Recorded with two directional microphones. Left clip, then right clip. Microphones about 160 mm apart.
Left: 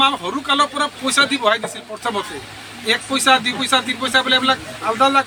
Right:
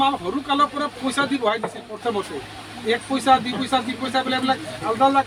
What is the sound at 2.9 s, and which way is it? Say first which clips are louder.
A man's voice: left 3 dB; 10° right (ahead or behind).